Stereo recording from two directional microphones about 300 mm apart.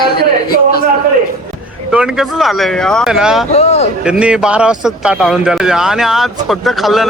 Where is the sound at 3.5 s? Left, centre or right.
Left.